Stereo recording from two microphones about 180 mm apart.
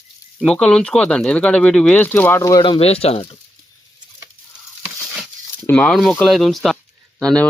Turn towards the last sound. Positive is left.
turn(degrees=5)  # may be behind; listen again after turning